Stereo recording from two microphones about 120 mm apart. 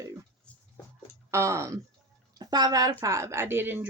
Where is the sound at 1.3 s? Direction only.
25° right (ahead or behind).